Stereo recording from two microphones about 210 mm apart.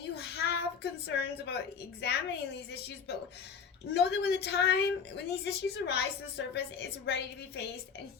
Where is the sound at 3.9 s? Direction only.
50° left (ahead or behind).